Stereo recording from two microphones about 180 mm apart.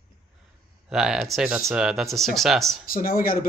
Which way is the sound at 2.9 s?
50° left (ahead or behind).